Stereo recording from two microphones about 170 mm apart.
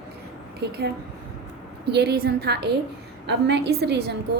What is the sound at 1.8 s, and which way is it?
A woman's voice, 75° right (ahead or behind).